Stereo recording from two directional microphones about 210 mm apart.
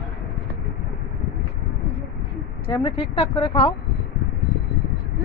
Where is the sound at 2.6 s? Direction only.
25° left (ahead or behind).